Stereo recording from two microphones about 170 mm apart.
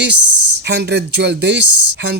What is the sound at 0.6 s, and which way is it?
Speech, 90° right.